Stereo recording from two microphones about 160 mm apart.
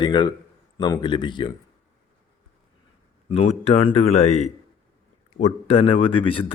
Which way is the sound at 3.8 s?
40° left (ahead or behind).